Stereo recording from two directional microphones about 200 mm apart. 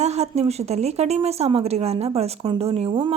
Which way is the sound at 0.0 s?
35° right (ahead or behind).